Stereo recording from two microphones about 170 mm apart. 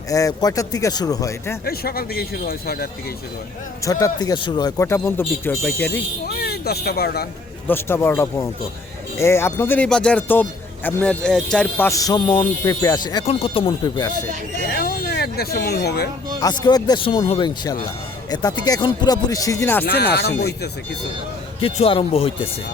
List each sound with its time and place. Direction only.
0.1 s speech: 20° left (ahead or behind)
1.6 s speech: 65° left (ahead or behind)
3.8 s speech: 20° left (ahead or behind)
6.2 s speech: 65° left (ahead or behind)
7.7 s speech: 15° left (ahead or behind)
11.9 s speech: 20° left (ahead or behind)
13.2 s speech: 35° left (ahead or behind)
14.7 s speech: 60° left (ahead or behind)
16.4 s speech: 25° left (ahead or behind)
19.8 s speech: 70° left (ahead or behind)
21.6 s speech: 35° left (ahead or behind)